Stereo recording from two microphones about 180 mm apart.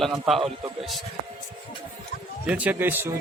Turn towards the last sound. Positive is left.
turn(degrees=-10)  # may be behind; listen again after turning